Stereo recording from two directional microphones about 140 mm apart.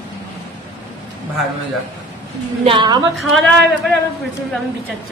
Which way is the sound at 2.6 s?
35° right (ahead or behind).